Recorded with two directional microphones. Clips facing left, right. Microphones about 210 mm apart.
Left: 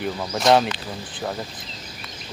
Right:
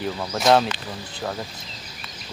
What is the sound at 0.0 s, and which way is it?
Speech, centre (ahead or behind).